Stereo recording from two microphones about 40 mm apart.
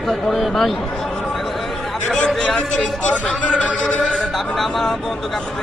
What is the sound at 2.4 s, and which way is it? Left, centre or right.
Speech, left.